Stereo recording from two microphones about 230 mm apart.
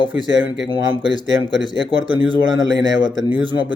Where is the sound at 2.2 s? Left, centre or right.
Right.